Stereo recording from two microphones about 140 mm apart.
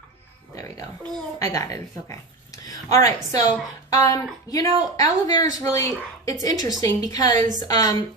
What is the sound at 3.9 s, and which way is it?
Speech, 25° left (ahead or behind).